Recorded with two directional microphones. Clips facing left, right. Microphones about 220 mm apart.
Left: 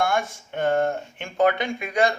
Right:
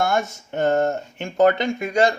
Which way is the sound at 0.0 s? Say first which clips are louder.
Right 2 dB; 45° right (ahead or behind).